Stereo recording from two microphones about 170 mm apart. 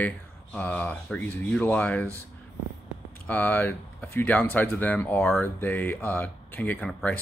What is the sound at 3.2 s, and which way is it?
Speech, 10° left (ahead or behind).